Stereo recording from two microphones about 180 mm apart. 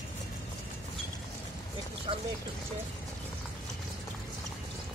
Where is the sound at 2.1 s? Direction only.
25° right (ahead or behind).